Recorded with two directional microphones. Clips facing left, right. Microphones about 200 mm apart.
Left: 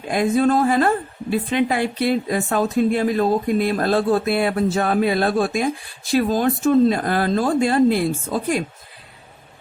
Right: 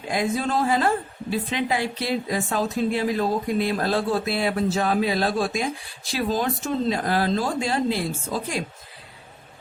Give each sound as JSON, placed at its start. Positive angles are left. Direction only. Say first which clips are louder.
{"t": 0.1, "sound": "a woman's voice", "louder": "left 7 dB", "side_deg": 55}